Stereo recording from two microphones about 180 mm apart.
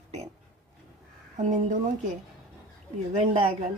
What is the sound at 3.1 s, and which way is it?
Speech, 40° right (ahead or behind).